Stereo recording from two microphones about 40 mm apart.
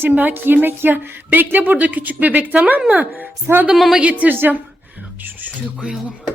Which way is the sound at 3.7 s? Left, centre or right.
Centre.